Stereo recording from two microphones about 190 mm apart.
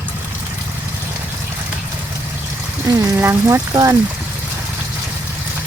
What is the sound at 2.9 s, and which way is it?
Speech, 15° right (ahead or behind).